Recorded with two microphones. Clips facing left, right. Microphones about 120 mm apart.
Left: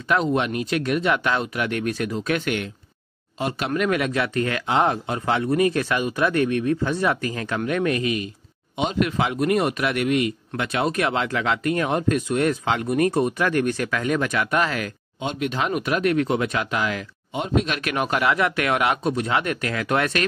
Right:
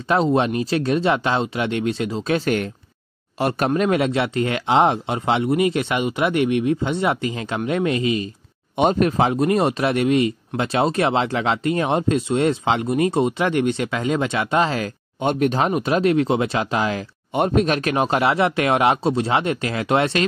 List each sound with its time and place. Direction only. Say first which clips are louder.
0.1 s speech: right 3 dB; 30° right (ahead or behind)
3.3 s speech: right 6 dB; 50° right (ahead or behind)
3.7 s speech: right 1 dB; 30° right (ahead or behind)
9.0 s speech: right 4 dB; 35° right (ahead or behind)
15.1 s speech: right 6 dB; 50° right (ahead or behind)
15.7 s speech: right 3 dB; 30° right (ahead or behind)
17.3 s speech: right 5 dB; 60° right (ahead or behind)
17.6 s speech: right 5 dB; 35° right (ahead or behind)